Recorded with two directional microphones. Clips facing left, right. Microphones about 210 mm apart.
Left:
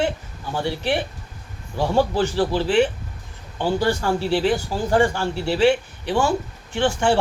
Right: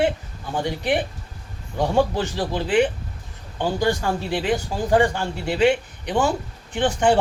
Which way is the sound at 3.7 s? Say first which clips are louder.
Left 1 dB; 15° right (ahead or behind).